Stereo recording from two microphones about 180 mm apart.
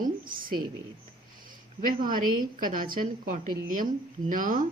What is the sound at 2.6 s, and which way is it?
Speech, 50° right (ahead or behind).